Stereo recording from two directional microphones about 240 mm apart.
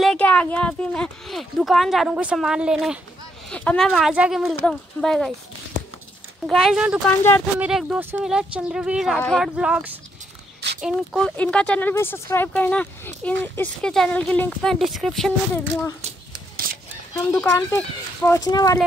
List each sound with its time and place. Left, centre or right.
0.0 s speech: centre
6.4 s speech: centre
16.6 s a sound: right
17.1 s speech: centre